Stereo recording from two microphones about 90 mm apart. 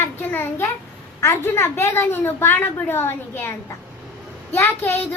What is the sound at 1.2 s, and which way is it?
A woman's voice, 25° left (ahead or behind).